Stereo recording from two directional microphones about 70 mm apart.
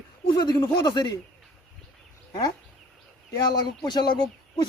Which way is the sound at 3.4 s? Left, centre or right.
Left.